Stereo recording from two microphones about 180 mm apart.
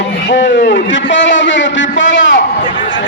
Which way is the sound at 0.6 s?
75° left (ahead or behind).